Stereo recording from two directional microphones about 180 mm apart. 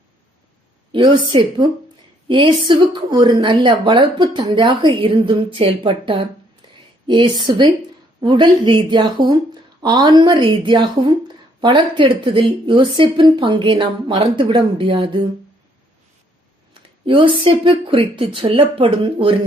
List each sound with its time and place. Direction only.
0.9 s a woman's voice: 25° right (ahead or behind)
16.7 s a woman's voice: 30° right (ahead or behind)